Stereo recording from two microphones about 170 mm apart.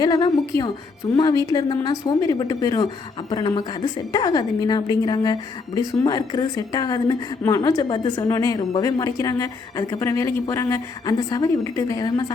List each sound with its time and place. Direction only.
0.0 s a woman's voice: 25° left (ahead or behind)